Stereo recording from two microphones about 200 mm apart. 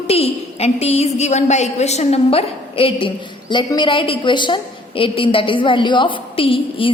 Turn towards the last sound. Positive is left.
turn(degrees=25)  # may be behind; listen again after turning